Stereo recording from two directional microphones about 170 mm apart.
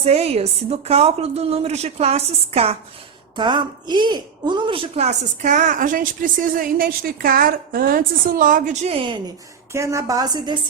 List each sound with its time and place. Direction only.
0.0 s a woman's voice: 40° right (ahead or behind)
3.3 s a woman's voice: 25° right (ahead or behind)
9.7 s a woman's voice: 15° right (ahead or behind)